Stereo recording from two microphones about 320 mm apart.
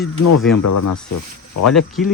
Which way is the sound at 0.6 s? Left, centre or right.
Left.